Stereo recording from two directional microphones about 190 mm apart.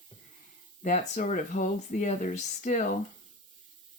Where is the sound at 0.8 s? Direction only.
40° left (ahead or behind).